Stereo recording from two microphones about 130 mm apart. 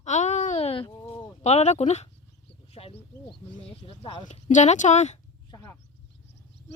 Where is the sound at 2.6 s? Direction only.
50° left (ahead or behind).